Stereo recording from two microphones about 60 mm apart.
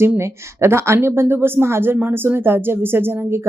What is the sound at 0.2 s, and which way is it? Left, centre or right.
Speech, right.